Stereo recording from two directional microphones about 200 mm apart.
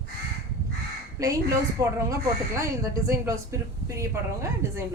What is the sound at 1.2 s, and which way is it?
Speech, 15° right (ahead or behind).